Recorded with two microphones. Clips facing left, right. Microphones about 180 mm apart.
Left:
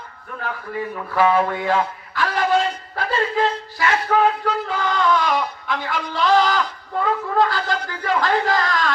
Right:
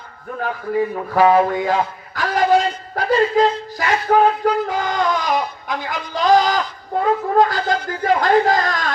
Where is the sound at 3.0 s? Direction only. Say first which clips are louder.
Right 6 dB; 40° right (ahead or behind).